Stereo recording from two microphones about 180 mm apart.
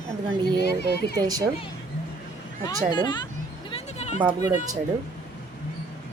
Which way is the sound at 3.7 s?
35° left (ahead or behind).